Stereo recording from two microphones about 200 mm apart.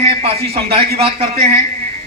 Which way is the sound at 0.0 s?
30° right (ahead or behind).